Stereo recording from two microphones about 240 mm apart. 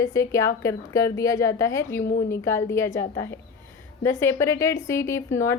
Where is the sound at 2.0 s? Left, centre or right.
Left.